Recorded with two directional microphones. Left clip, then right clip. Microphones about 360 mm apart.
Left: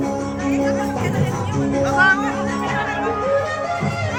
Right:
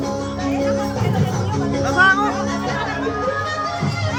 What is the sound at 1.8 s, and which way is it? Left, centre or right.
Music, right.